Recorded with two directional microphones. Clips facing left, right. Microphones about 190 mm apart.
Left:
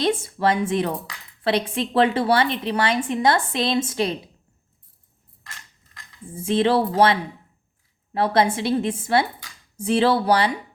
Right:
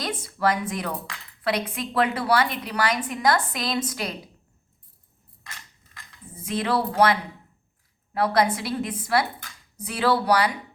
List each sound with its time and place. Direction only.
0.0 s a woman's voice: 25° left (ahead or behind)
6.2 s a woman's voice: 30° left (ahead or behind)